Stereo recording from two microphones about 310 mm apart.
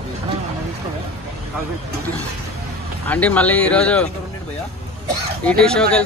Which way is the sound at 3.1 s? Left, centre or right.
Centre.